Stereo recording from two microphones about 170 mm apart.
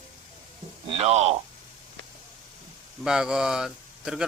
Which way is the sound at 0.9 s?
40° right (ahead or behind).